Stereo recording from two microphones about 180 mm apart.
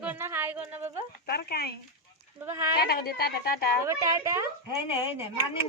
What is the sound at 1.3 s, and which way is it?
Speech, 60° left (ahead or behind).